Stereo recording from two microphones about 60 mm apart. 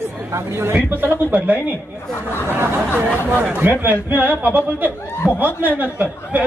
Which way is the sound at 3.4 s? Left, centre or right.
Right.